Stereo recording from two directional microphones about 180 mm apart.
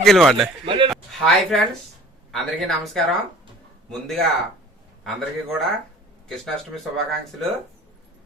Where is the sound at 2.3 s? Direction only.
Centre (ahead or behind).